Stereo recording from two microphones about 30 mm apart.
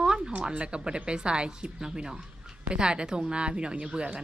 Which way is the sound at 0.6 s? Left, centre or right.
Right.